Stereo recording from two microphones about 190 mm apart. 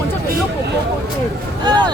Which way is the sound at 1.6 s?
20° right (ahead or behind).